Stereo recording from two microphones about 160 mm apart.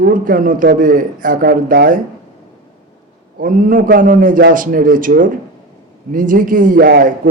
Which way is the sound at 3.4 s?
55° right (ahead or behind).